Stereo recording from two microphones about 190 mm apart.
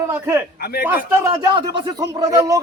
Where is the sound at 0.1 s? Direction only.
10° right (ahead or behind).